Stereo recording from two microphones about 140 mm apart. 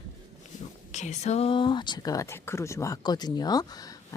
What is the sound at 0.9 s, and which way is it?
Speech, 55° left (ahead or behind).